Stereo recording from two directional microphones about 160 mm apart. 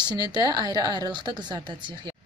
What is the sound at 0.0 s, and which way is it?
Speech, 25° right (ahead or behind).